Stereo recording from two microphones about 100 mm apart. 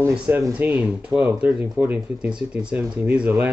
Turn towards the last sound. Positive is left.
turn(degrees=-15)  # may be behind; listen again after turning